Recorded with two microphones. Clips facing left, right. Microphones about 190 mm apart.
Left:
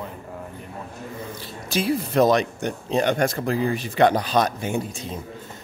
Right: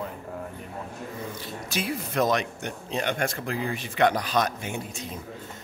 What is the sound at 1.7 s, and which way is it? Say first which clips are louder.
Speech: left 8 dB; 30° left (ahead or behind).